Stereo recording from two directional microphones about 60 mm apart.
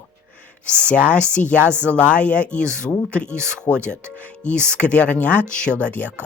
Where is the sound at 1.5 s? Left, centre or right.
Right.